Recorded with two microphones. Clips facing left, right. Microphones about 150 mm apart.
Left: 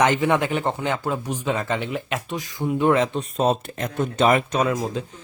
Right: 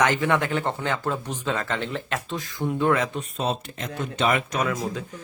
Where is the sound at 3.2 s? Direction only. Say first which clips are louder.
Left 6 dB; 45° left (ahead or behind).